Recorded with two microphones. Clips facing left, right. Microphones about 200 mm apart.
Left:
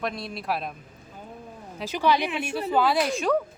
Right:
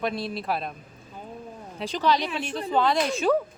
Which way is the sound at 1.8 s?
10° left (ahead or behind).